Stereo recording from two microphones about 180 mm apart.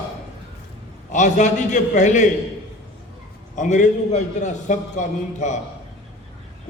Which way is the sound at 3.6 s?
45° left (ahead or behind).